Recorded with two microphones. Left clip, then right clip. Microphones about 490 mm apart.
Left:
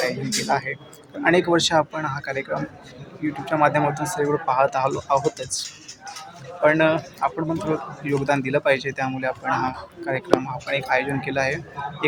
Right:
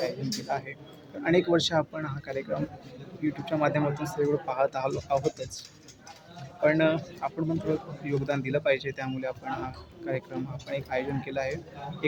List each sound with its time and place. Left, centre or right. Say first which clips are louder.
0.4 s speech: left 10 dB; right